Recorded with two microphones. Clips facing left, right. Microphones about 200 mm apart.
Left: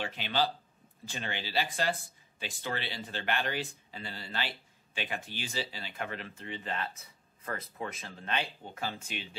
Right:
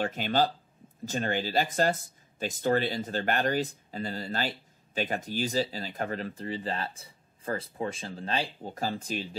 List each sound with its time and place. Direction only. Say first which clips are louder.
0.0 s speech: right 5 dB; 45° right (ahead or behind)